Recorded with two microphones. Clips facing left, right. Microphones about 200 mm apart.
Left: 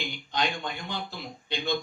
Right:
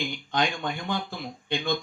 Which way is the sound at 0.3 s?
50° right (ahead or behind).